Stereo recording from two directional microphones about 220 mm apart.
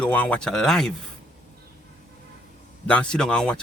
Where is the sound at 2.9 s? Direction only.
5° left (ahead or behind).